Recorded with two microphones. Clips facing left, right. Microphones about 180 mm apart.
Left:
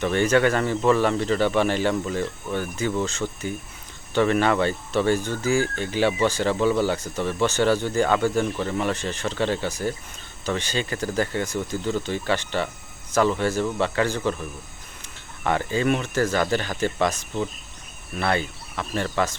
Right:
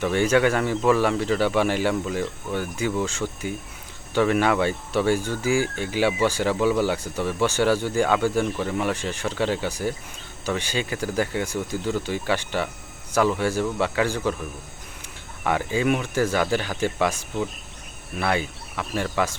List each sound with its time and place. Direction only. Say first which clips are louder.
0.0 s speech: even; 10° right (ahead or behind)
15.4 s speech: even; 10° right (ahead or behind)